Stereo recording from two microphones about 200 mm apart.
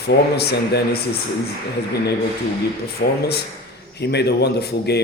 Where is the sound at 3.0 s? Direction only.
50° left (ahead or behind).